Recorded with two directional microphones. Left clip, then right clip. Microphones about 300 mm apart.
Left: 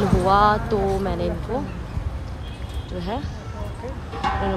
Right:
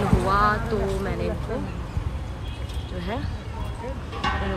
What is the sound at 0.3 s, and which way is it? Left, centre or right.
Speech, centre.